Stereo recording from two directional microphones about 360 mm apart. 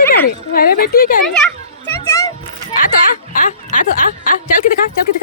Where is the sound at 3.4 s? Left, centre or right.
Left.